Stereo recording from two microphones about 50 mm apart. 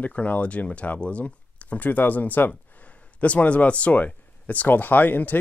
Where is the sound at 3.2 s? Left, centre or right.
Left.